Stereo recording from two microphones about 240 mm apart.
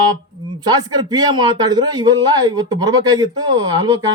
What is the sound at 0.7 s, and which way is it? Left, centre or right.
Speech, centre.